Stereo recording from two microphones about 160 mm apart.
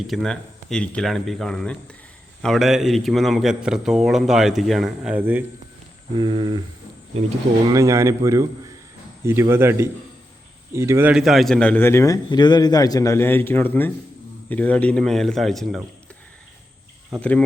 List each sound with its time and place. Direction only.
0.1 s a man's voice: centre (ahead or behind)
6.1 s speech: 30° right (ahead or behind)
7.7 s a man's voice: 20° right (ahead or behind)
11.2 s a man's voice: centre (ahead or behind)
17.2 s a man's voice: 5° left (ahead or behind)